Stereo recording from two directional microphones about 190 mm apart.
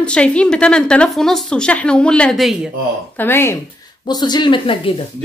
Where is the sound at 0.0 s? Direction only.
5° left (ahead or behind).